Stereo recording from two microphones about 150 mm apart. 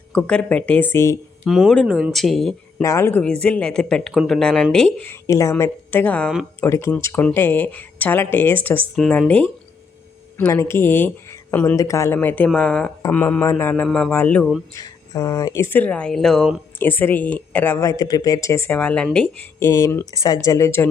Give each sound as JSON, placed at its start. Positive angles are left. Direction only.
{"t": 0.1, "sound": "speech", "side_deg": 5}
{"t": 1.5, "sound": "speech", "side_deg": 0}
{"t": 2.8, "sound": "speech", "side_deg": 15}
{"t": 14.8, "sound": "speech", "side_deg": 25}
{"t": 17.7, "sound": "speech", "side_deg": 25}
{"t": 18.8, "sound": "speech", "side_deg": 10}
{"t": 19.5, "sound": "speech", "side_deg": 20}